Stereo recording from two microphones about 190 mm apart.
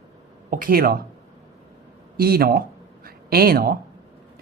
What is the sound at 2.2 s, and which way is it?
Speech, 55° right (ahead or behind).